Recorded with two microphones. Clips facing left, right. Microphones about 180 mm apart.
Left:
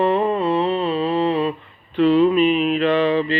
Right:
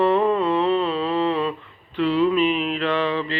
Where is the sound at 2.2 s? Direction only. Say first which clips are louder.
Left 4 dB; 20° left (ahead or behind).